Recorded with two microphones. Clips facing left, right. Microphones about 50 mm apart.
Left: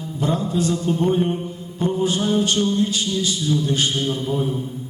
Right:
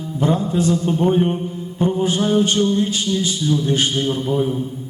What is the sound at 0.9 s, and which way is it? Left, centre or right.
A man's voice, right.